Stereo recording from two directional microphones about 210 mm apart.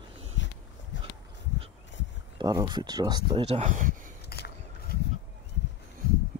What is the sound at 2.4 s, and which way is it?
Speech, 20° right (ahead or behind).